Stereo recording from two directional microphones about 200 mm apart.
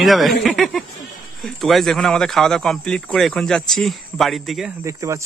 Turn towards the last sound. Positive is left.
turn(degrees=-15)  # may be behind; listen again after turning